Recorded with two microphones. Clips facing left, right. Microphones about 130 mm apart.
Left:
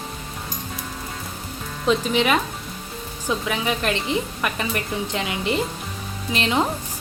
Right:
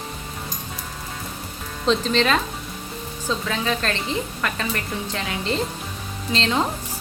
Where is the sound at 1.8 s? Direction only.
10° left (ahead or behind).